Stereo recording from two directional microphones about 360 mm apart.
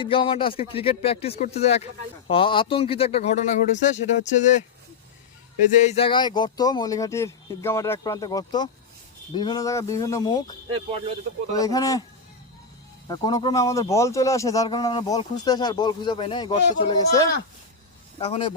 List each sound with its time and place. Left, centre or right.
0.0 s speech: centre
5.7 s speech: centre
11.5 s speech: centre
13.1 s speech: centre